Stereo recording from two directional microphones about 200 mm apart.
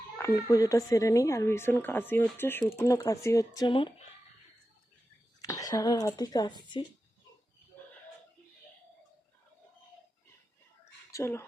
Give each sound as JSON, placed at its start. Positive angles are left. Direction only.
{"t": 0.2, "sound": "speech", "side_deg": 10}
{"t": 5.4, "sound": "speech", "side_deg": 15}
{"t": 11.1, "sound": "speech", "side_deg": 15}